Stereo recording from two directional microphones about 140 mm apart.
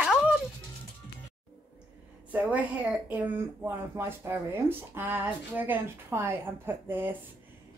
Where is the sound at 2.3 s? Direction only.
10° right (ahead or behind).